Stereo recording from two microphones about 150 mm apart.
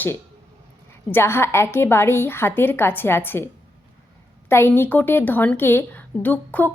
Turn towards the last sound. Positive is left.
turn(degrees=10)  # may be behind; listen again after turning